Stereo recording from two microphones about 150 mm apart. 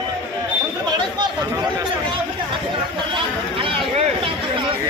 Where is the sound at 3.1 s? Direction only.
35° right (ahead or behind).